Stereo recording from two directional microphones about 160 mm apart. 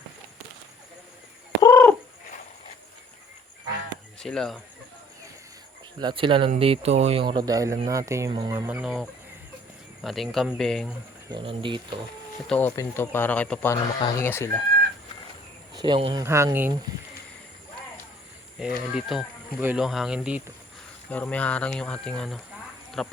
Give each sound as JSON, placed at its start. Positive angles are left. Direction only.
{"t": 1.6, "sound": "bird", "side_deg": 10}
{"t": 4.2, "sound": "speech", "side_deg": 5}
{"t": 6.0, "sound": "speech", "side_deg": -30}
{"t": 8.3, "sound": "speech", "side_deg": -30}
{"t": 8.5, "sound": "speech", "side_deg": -15}
{"t": 8.8, "sound": "speech", "side_deg": -5}
{"t": 11.3, "sound": "speech", "side_deg": -30}
{"t": 12.5, "sound": "speech", "side_deg": 10}
{"t": 15.7, "sound": "speech", "side_deg": -30}
{"t": 16.2, "sound": "speech", "side_deg": -15}
{"t": 18.6, "sound": "speech", "side_deg": -5}
{"t": 21.1, "sound": "speech", "side_deg": 10}